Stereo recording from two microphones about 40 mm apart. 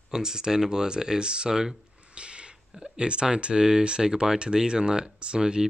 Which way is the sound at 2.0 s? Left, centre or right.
Right.